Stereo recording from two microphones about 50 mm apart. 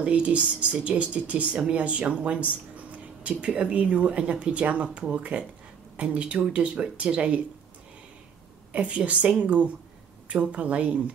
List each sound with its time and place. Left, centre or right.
0.0 s speech: right
8.7 s speech: right